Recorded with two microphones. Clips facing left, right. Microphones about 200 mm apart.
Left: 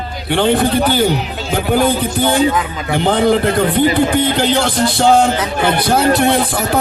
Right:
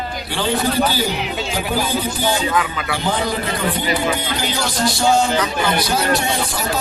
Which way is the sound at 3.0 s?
55° left (ahead or behind).